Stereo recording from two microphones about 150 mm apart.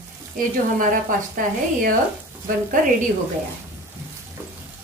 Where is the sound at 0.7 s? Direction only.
65° right (ahead or behind).